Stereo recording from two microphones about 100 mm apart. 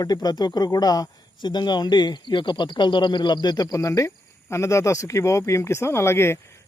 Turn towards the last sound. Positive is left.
turn(degrees=25)  # may be behind; listen again after turning